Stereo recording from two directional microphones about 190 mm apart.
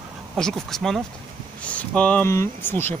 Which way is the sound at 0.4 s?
Centre (ahead or behind).